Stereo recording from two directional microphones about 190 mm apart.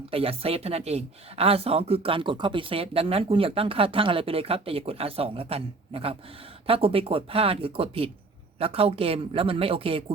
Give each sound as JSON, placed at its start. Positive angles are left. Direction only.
{"t": 0.1, "sound": "speech", "side_deg": -30}